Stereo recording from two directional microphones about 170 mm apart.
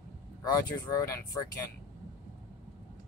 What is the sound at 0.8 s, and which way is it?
Speech, 20° left (ahead or behind).